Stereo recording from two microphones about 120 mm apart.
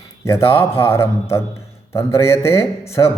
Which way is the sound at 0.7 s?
20° left (ahead or behind).